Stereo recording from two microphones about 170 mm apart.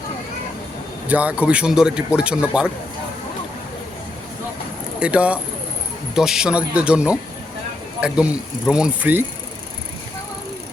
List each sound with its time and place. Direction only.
1.0 s a man's voice: 10° right (ahead or behind)
4.9 s a man's voice: 5° right (ahead or behind)